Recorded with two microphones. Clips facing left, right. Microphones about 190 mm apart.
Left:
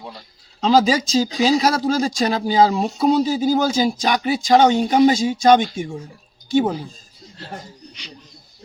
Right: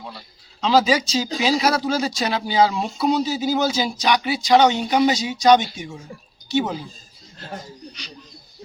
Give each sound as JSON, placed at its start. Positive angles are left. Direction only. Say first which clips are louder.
{"t": 0.6, "sound": "speech", "louder": "left 2 dB", "side_deg": 45}